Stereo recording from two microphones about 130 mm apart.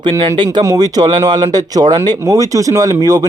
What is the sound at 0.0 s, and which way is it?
Speech, 35° right (ahead or behind).